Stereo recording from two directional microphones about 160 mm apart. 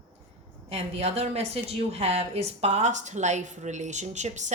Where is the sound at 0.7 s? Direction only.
40° right (ahead or behind).